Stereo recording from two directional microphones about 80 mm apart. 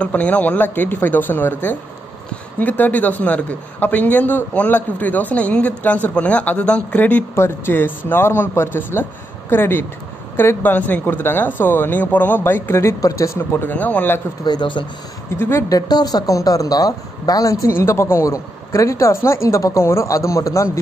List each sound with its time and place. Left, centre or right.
0.0 s a man's voice: centre
7.3 s a man's voice: left
13.0 s a man's voice: left
14.4 s speech: left
15.3 s a man's voice: left
15.7 s speech: left
17.6 s speech: left